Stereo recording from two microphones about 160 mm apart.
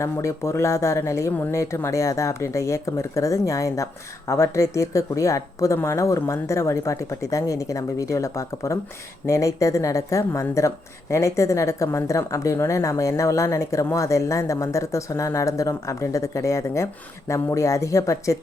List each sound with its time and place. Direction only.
0.0 s speech: 20° left (ahead or behind)